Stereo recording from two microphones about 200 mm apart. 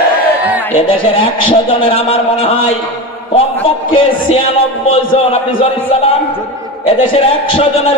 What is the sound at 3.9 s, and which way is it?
A man's voice, 25° left (ahead or behind).